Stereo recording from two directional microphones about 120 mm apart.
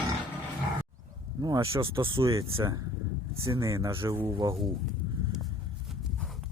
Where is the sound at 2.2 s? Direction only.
25° right (ahead or behind).